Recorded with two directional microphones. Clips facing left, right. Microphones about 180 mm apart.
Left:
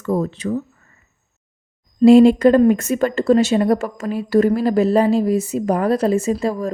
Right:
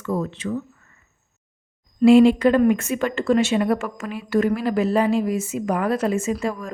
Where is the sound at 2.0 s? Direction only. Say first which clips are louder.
Left 4 dB; 40° left (ahead or behind).